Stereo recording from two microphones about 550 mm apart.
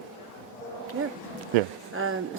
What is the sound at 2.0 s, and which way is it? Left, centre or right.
Speech, right.